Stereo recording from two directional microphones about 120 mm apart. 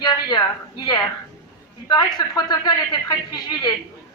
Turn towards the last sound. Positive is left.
turn(degrees=35)  # may be behind; listen again after turning